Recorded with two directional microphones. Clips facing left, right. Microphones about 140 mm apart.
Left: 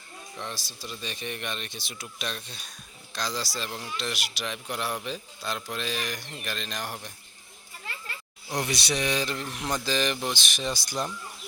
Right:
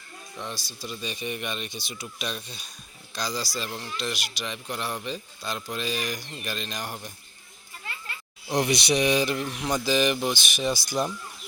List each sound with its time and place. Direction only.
0.3 s speech: centre (ahead or behind)
8.4 s speech: 20° right (ahead or behind)
9.5 s speech: centre (ahead or behind)